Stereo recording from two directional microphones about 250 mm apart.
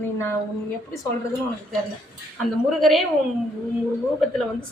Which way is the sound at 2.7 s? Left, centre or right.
Centre.